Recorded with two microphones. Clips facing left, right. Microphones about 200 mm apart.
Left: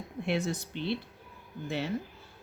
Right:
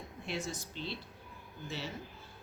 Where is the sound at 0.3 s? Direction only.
60° left (ahead or behind).